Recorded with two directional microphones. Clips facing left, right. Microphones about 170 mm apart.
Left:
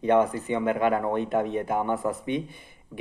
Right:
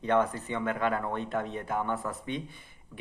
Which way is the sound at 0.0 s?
10° left (ahead or behind).